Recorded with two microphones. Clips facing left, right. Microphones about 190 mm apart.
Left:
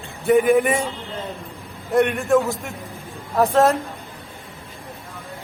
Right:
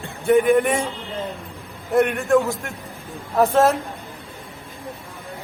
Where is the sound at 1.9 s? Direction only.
Centre (ahead or behind).